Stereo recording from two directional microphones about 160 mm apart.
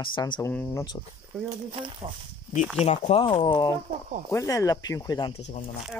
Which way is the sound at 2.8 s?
40° left (ahead or behind).